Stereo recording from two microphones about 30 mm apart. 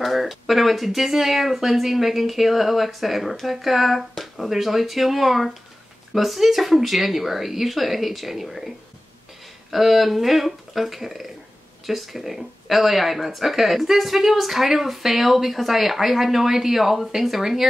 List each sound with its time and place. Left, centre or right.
0.0 s speech: centre
9.7 s speech: centre